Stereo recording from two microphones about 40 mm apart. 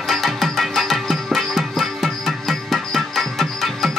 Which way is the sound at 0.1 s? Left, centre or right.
Centre.